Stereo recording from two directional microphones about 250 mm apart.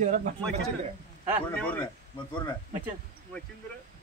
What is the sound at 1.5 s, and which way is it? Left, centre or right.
Speech, centre.